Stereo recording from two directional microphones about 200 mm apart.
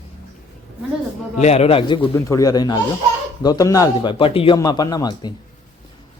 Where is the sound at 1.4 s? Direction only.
35° left (ahead or behind).